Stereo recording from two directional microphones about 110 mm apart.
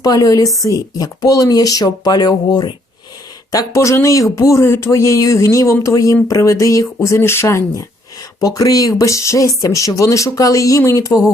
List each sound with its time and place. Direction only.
0.0 s speech: 35° left (ahead or behind)